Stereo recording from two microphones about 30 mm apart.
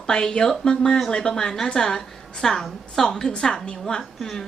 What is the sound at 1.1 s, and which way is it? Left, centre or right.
A woman's voice, left.